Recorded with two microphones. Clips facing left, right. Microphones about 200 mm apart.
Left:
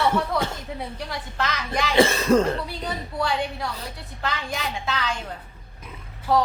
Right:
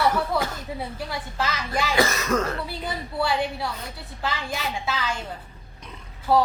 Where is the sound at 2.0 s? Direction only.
30° left (ahead or behind).